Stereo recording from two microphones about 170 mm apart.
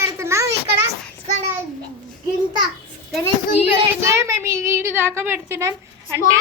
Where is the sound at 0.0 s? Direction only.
15° right (ahead or behind).